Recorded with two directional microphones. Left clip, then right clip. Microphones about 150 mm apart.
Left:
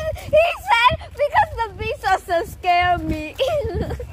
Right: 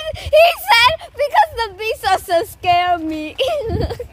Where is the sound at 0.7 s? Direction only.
80° right; by 2.8 s 50° right (ahead or behind).